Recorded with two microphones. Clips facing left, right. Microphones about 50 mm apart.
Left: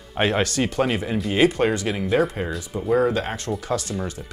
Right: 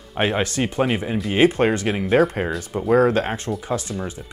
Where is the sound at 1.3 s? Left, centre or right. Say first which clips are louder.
Right 2 dB; right.